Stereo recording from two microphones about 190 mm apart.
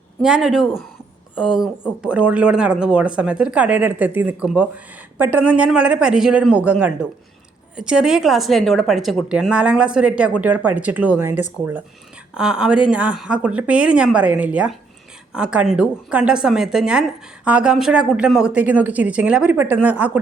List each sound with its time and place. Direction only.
0.2 s a woman's voice: 5° right (ahead or behind)
12.4 s a woman's voice: 5° right (ahead or behind)